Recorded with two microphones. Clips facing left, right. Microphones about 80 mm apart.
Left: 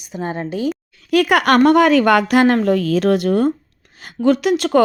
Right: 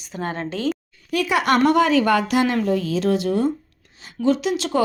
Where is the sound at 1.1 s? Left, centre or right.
Left.